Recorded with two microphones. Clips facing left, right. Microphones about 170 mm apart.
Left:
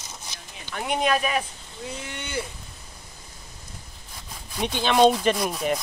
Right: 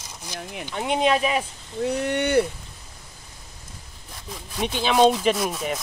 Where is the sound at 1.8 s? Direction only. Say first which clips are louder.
Right 13 dB; 65° right (ahead or behind).